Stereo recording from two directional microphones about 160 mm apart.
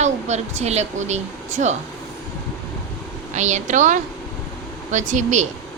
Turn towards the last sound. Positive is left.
turn(degrees=-50)  # may be behind; listen again after turning